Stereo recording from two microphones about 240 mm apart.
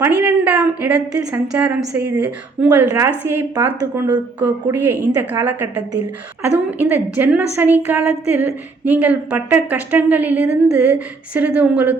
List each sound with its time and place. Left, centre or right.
0.2 s a woman's voice: centre
6.7 s a woman's voice: centre